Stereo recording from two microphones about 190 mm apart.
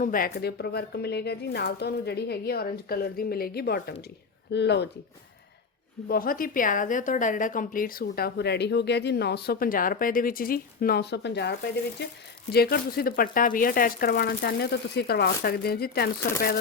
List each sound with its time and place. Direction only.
0.0 s speech: 50° left (ahead or behind)
6.1 s a woman's voice: 50° left (ahead or behind)
12.5 s speech: 55° left (ahead or behind)